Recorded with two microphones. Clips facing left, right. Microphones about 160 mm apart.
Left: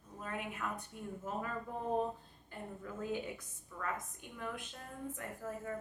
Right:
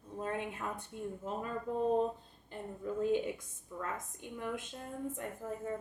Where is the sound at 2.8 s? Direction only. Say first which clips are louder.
Right 8 dB; 20° right (ahead or behind).